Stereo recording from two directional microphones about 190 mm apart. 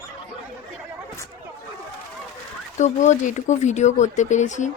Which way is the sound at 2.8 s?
40° left (ahead or behind).